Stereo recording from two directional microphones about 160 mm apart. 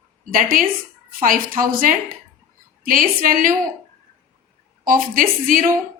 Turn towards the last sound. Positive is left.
turn(degrees=-60)  # may be behind; listen again after turning